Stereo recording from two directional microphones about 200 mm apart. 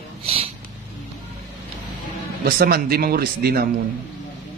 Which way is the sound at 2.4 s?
50° right (ahead or behind).